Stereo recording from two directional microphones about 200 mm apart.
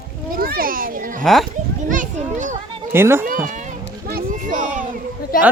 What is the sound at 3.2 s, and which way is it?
Speech, 45° right (ahead or behind).